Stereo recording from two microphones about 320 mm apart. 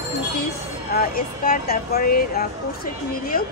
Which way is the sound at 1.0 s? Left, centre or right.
Left.